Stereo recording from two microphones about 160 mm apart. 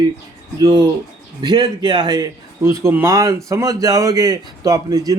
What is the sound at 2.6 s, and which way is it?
A man's voice, 15° right (ahead or behind).